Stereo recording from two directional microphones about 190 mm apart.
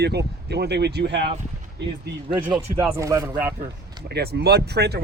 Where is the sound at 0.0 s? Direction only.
60° right (ahead or behind).